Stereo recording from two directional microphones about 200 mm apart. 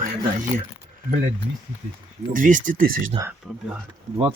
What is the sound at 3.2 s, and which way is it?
Speech, 20° right (ahead or behind).